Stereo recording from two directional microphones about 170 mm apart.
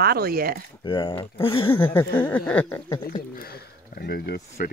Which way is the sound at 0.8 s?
25° left (ahead or behind).